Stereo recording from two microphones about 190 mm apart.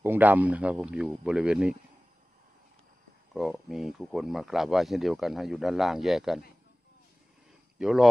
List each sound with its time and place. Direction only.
0.0 s speech: 10° right (ahead or behind)
3.3 s speech: centre (ahead or behind)
7.8 s speech: centre (ahead or behind)